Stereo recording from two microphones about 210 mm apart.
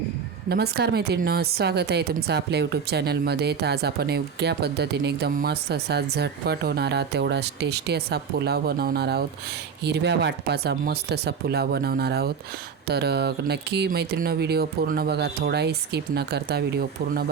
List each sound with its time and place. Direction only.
0.4 s a woman's voice: 50° right (ahead or behind)